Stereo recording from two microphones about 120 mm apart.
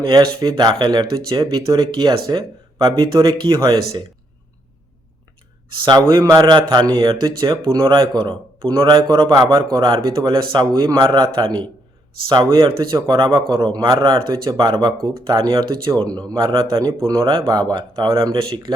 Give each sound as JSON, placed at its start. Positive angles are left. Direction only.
{"t": 0.1, "sound": "speech", "side_deg": -30}
{"t": 5.8, "sound": "speech", "side_deg": -35}